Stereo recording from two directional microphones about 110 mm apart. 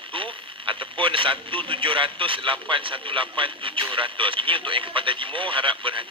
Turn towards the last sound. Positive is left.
turn(degrees=-50)  # may be behind; listen again after turning